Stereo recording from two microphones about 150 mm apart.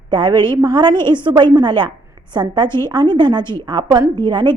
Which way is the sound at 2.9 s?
30° right (ahead or behind).